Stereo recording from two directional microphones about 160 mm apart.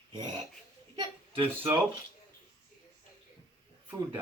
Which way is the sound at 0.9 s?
25° right (ahead or behind).